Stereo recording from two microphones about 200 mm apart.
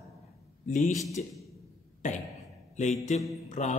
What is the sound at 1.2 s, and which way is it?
Speech, 40° left (ahead or behind).